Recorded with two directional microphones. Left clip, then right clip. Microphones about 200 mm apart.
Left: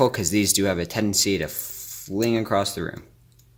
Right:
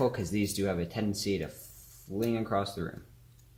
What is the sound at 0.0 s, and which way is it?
Speech, 60° left (ahead or behind).